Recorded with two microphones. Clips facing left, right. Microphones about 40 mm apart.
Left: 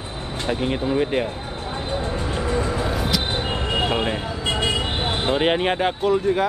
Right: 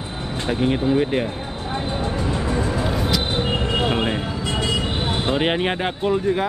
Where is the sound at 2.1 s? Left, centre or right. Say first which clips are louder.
Right 1 dB; left.